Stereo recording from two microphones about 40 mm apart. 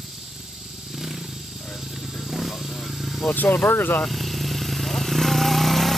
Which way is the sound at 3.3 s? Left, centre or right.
Left.